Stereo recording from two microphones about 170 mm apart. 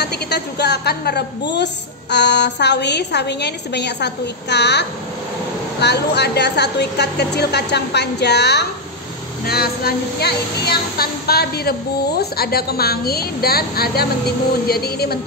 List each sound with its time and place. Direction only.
0.0 s a woman's voice: 75° left (ahead or behind)
1.5 s a woman's voice: 90° left
9.5 s a woman's voice: 65° left (ahead or behind)